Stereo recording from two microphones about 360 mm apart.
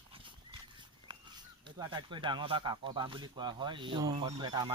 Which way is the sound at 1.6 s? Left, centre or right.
Centre.